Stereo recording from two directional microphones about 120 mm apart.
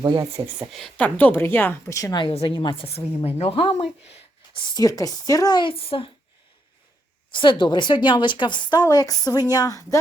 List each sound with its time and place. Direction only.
0.0 s speech: 30° right (ahead or behind)
0.7 s a woman's voice: centre (ahead or behind)
0.9 s a woman's voice: 15° left (ahead or behind)
2.3 s a woman's voice: 50° left (ahead or behind)
3.2 s speech: 60° left (ahead or behind)
4.5 s speech: 30° left (ahead or behind)
5.7 s a woman's voice: 50° left (ahead or behind)
7.3 s speech: 40° left (ahead or behind)